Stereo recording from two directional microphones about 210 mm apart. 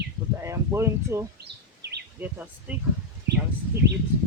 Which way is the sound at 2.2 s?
5° right (ahead or behind).